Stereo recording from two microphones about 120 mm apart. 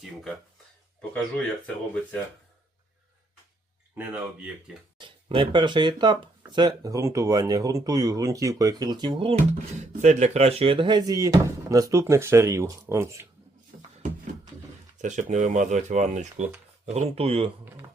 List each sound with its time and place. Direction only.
1.1 s speech: 10° left (ahead or behind)
3.9 s speech: 15° right (ahead or behind)
4.9 s speech: 45° right (ahead or behind)
10.0 s speech: 80° right; by 13.2 s 25° right (ahead or behind)
15.0 s speech: 85° right
16.8 s speech: 60° right (ahead or behind)